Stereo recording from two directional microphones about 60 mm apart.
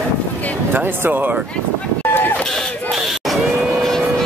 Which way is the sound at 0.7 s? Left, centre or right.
Right.